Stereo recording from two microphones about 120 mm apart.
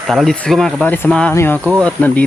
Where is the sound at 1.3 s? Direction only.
20° left (ahead or behind).